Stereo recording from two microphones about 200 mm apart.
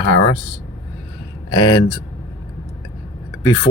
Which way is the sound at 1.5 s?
20° left (ahead or behind).